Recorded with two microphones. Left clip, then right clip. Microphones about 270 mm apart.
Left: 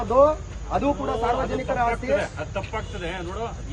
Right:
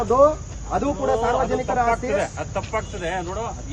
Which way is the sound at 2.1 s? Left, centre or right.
Centre.